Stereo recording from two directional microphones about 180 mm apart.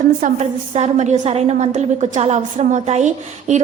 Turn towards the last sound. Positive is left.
turn(degrees=-40)  # may be behind; listen again after turning